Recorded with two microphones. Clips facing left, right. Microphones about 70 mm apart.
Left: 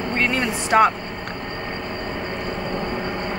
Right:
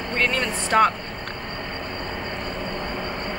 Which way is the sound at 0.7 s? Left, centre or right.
Centre.